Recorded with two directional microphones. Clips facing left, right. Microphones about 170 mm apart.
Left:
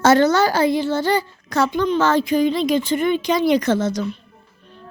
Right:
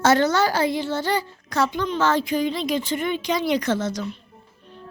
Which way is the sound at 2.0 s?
40° left (ahead or behind).